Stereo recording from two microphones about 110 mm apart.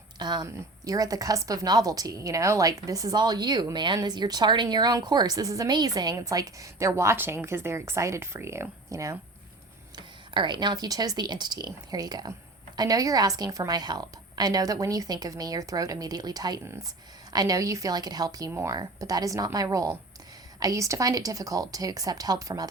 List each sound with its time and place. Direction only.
0.2 s a woman's voice: 40° right (ahead or behind)
9.9 s a woman's voice: 45° right (ahead or behind)
18.5 s speech: 25° right (ahead or behind)
18.8 s a woman's voice: 35° right (ahead or behind)